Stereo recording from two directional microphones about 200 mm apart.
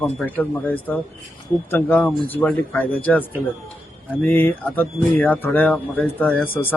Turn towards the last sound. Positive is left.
turn(degrees=25)  # may be behind; listen again after turning